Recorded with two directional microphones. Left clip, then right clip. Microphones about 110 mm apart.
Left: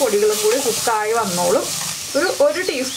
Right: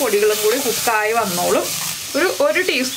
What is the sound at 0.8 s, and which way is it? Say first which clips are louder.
Speech: right 1 dB; 30° right (ahead or behind).